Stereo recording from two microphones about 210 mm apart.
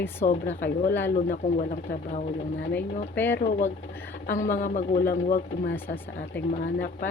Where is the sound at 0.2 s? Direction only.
45° left (ahead or behind).